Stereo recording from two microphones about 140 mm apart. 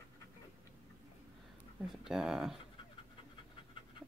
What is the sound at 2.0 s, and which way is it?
Speech, 5° right (ahead or behind).